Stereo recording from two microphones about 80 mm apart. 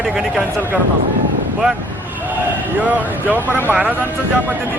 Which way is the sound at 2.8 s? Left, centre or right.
Right.